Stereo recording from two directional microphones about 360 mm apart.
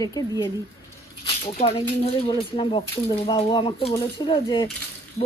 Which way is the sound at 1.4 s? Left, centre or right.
Centre.